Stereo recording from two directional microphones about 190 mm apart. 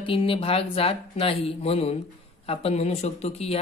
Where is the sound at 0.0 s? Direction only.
30° left (ahead or behind).